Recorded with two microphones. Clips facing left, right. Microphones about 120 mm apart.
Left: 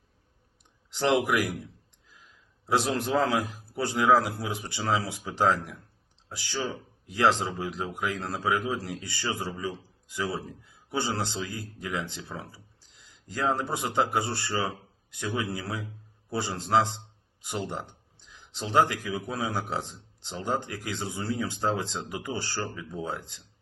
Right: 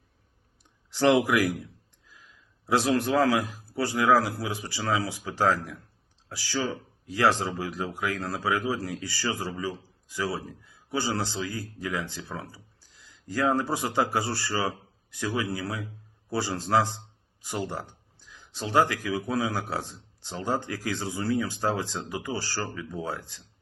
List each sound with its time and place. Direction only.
0.9 s speech: 20° left (ahead or behind)
3.0 s speech: 20° left (ahead or behind)
17.7 s a sound: 20° left (ahead or behind)
19.4 s speech: 20° left (ahead or behind)